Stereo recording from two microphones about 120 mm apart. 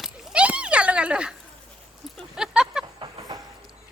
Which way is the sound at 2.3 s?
5° right (ahead or behind).